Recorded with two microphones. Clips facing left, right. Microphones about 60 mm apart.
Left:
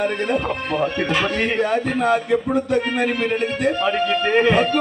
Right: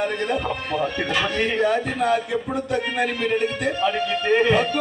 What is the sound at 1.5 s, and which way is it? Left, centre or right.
Speech, left.